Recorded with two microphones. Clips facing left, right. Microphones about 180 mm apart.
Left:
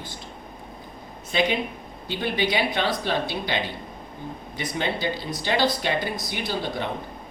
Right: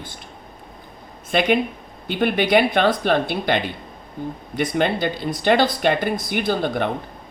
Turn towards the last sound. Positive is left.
turn(degrees=-55)  # may be behind; listen again after turning